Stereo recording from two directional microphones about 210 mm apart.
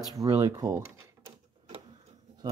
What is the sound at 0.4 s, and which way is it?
Speech, 15° right (ahead or behind).